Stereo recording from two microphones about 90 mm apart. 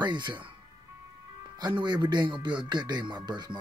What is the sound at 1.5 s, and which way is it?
Speech, 55° right (ahead or behind).